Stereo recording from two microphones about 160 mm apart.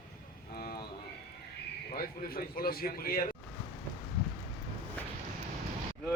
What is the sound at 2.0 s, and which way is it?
A man's voice, 70° left (ahead or behind).